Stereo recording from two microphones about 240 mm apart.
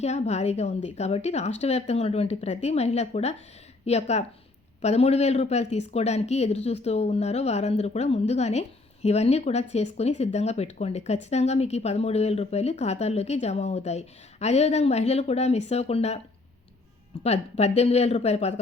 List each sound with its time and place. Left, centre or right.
0.0 s speech: left
17.2 s speech: left